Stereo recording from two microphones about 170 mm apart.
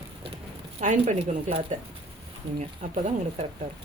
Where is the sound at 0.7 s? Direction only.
40° right (ahead or behind).